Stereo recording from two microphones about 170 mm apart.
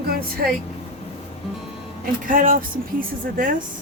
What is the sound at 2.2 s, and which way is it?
Speech, 55° right (ahead or behind).